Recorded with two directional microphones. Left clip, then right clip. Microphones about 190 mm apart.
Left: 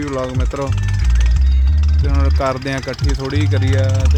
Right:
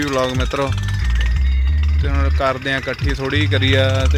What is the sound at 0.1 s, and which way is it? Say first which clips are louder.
Speech: right 3 dB; 5° right (ahead or behind).